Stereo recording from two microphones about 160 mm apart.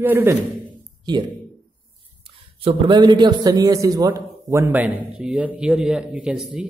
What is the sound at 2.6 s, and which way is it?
A man's voice, 30° right (ahead or behind).